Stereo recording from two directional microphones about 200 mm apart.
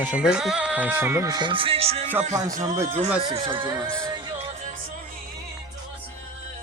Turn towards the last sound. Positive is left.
turn(degrees=-30)  # may be behind; listen again after turning